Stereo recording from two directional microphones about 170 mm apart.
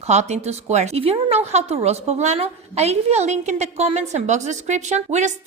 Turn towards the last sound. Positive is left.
turn(degrees=-45)  # may be behind; listen again after turning